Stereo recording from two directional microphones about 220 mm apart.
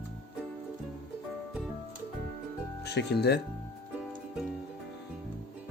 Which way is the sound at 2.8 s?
50° left (ahead or behind).